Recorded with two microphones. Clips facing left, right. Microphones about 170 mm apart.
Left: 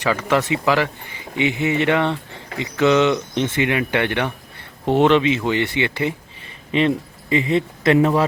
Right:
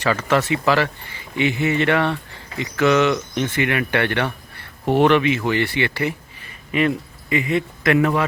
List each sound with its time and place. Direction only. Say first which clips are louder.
0.0 s speech: even; 15° left (ahead or behind); by 8.2 s 30° left (ahead or behind)